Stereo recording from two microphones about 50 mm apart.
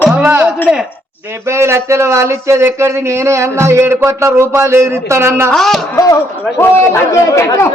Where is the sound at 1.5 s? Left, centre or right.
Right.